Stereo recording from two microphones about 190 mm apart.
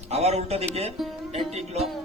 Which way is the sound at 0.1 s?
35° right (ahead or behind).